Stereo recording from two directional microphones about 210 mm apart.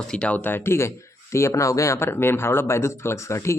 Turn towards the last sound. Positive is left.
turn(degrees=15)  # may be behind; listen again after turning